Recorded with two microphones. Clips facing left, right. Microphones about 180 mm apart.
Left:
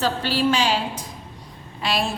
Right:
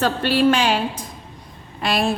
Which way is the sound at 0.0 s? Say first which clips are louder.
Right 4 dB; 60° right (ahead or behind).